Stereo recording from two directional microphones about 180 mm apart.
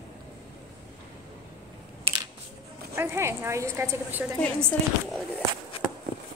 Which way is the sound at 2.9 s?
15° right (ahead or behind).